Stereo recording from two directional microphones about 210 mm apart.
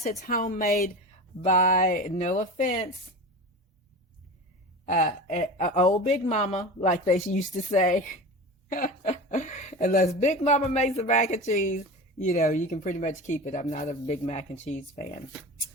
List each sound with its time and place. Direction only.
0.2 s speech: 40° left (ahead or behind)
4.9 s speech: 35° left (ahead or behind)